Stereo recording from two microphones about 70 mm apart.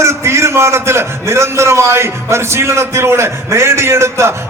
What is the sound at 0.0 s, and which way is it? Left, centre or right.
A man's voice, right.